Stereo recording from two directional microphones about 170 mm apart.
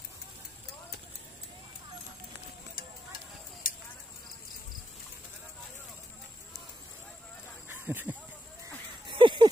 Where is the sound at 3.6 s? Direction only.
55° left (ahead or behind).